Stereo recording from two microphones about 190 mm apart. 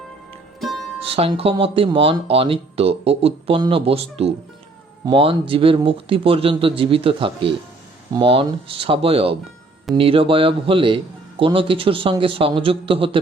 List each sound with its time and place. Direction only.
0.6 s music: centre (ahead or behind)
1.1 s speech: 30° right (ahead or behind)